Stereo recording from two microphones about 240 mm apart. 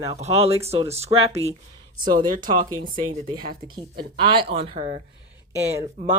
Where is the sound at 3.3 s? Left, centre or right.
Right.